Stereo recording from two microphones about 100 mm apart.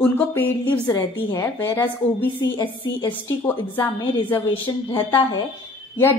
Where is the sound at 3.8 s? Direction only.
20° left (ahead or behind).